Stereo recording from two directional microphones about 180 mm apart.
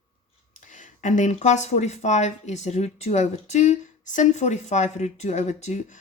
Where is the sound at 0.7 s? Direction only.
45° left (ahead or behind).